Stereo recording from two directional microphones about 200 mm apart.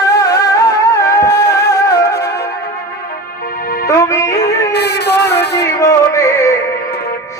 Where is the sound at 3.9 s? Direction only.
15° left (ahead or behind).